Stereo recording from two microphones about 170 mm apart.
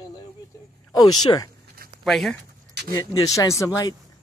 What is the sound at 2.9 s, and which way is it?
Speech, 20° left (ahead or behind).